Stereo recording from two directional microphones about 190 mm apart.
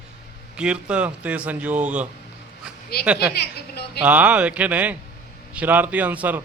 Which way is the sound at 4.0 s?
10° right (ahead or behind).